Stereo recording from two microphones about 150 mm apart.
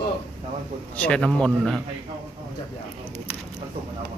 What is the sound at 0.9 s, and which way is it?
Speech, 10° left (ahead or behind).